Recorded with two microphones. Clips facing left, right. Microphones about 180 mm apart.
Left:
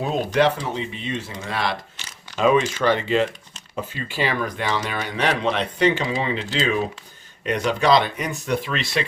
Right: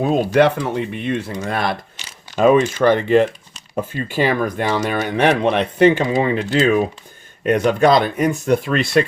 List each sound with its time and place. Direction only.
0.3 s speech: 55° right (ahead or behind)